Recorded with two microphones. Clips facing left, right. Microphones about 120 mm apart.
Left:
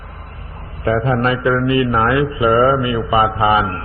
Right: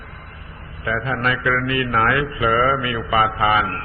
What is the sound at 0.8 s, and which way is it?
A man's voice, 35° left (ahead or behind).